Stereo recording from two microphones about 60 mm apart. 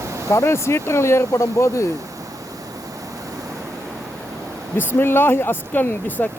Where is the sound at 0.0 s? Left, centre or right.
Right.